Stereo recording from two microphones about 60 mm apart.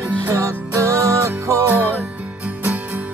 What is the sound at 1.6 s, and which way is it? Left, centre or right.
Music, right.